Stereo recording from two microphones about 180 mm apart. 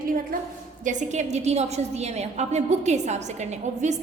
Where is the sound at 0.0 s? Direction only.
50° right (ahead or behind).